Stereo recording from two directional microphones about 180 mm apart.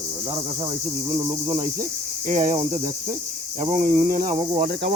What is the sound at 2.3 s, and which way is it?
Speech, 45° right (ahead or behind).